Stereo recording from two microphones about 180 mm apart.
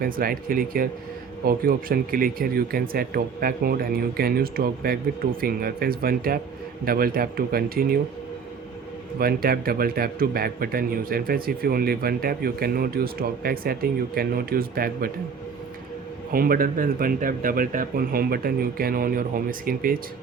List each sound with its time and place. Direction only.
0.0 s a man's voice: 55° right (ahead or behind)
9.1 s a man's voice: 55° right (ahead or behind)
16.3 s speech: 55° right (ahead or behind)